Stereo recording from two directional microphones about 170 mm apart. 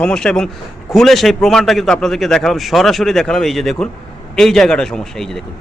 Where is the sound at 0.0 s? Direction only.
5° left (ahead or behind).